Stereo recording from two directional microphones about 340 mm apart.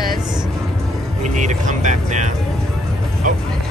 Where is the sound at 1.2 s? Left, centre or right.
Right.